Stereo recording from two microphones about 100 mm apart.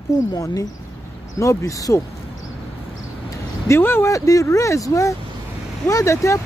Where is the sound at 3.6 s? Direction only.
25° left (ahead or behind).